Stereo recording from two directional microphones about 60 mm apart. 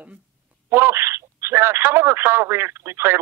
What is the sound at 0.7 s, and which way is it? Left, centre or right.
Speech, right.